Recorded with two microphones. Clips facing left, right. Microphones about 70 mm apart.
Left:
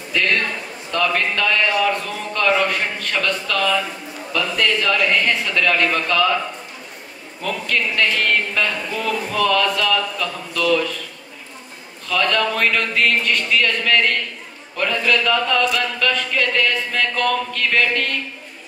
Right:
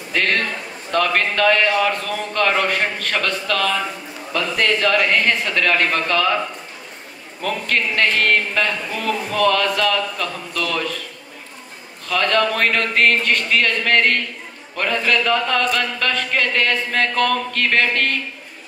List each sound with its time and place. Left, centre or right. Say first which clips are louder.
0.1 s a sound: even; right
0.9 s a man's voice: right 2 dB; right
7.4 s a man's voice: right 1 dB; right
12.1 s a man's voice: right 1 dB; right